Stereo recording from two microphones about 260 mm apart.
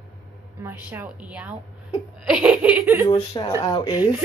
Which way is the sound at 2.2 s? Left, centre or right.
Centre.